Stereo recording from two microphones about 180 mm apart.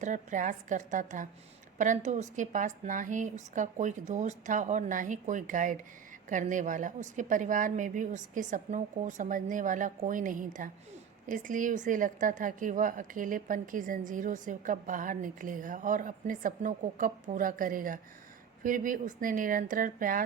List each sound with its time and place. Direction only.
0.0 s a woman's voice: 45° right (ahead or behind)